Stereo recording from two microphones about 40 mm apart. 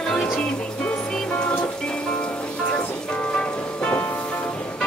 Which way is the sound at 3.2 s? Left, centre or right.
Left.